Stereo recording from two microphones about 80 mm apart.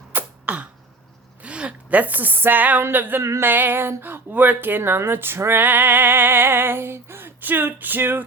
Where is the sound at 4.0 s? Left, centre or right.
Right.